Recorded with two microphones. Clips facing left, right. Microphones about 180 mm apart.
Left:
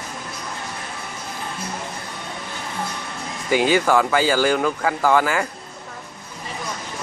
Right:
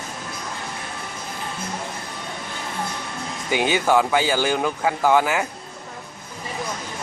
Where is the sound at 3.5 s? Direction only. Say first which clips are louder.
Left 2 dB; 20° right (ahead or behind).